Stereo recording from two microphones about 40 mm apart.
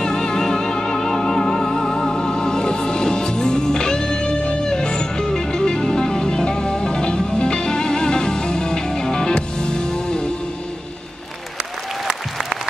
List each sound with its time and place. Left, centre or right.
0.0 s music: centre